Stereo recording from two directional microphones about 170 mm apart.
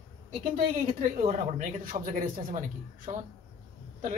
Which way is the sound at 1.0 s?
50° right (ahead or behind).